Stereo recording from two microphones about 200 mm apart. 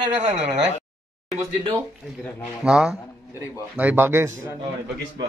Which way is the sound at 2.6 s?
5° right (ahead or behind).